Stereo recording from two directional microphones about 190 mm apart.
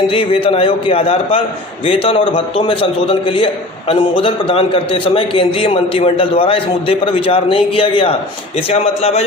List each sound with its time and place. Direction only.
0.1 s a man's voice: 30° left (ahead or behind)